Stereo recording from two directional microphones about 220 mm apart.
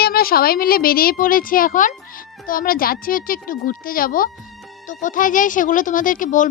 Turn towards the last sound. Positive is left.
turn(degrees=35)  # may be behind; listen again after turning